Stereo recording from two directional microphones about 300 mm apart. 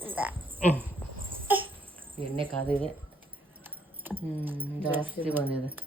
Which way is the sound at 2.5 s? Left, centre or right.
Centre.